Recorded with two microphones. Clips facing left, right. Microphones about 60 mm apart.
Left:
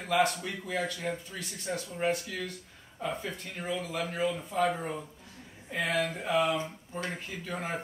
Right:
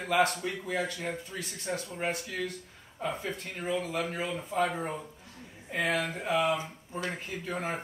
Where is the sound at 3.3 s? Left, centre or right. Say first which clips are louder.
Right 2 dB; centre.